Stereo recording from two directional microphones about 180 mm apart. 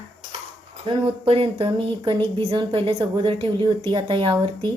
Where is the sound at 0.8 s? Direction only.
30° right (ahead or behind).